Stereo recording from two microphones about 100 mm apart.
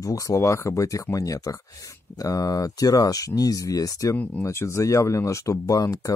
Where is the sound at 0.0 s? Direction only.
35° left (ahead or behind).